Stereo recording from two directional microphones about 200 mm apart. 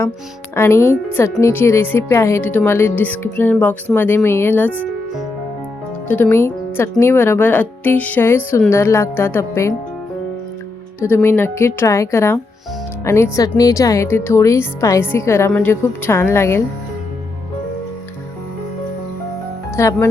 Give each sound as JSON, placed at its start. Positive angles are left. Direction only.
{"t": 0.5, "sound": "speech", "side_deg": 10}
{"t": 11.0, "sound": "speech", "side_deg": 10}
{"t": 19.7, "sound": "speech", "side_deg": 15}